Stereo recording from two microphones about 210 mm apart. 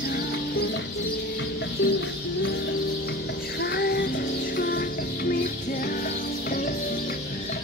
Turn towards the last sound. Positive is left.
turn(degrees=45)  # may be behind; listen again after turning